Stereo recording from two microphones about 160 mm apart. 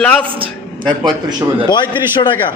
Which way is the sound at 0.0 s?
10° left (ahead or behind).